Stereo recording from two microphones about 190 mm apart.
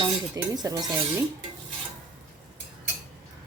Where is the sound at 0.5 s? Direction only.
20° right (ahead or behind).